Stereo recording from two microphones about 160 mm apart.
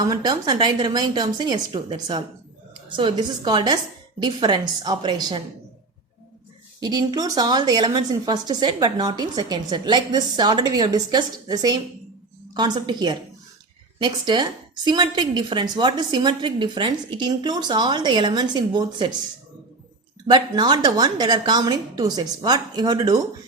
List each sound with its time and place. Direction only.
0.1 s a woman's voice: 25° right (ahead or behind)
6.7 s a woman's voice: 25° right (ahead or behind)
20.2 s a woman's voice: 30° right (ahead or behind)